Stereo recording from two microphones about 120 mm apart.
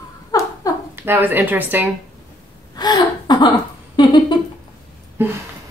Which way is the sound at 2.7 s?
35° left (ahead or behind).